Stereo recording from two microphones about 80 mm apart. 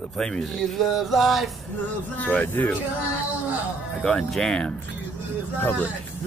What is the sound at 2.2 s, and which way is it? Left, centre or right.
Speech, centre.